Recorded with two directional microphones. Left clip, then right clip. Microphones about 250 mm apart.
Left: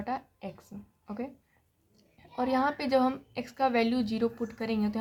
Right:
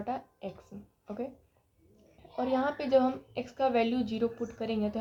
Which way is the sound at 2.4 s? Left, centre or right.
Left.